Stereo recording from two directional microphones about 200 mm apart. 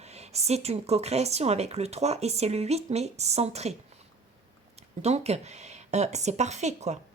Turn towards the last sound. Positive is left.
turn(degrees=-35)  # may be behind; listen again after turning